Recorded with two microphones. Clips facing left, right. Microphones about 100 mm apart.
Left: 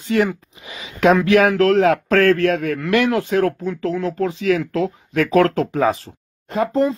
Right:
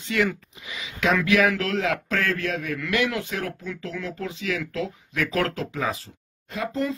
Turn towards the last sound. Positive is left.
turn(degrees=45)  # may be behind; listen again after turning